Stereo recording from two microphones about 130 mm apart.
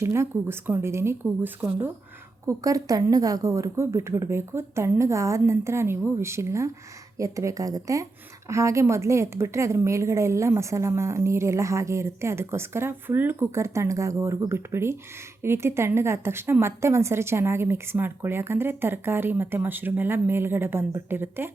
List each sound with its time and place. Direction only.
0.0 s a woman's voice: 20° right (ahead or behind)
2.5 s a woman's voice: 25° right (ahead or behind)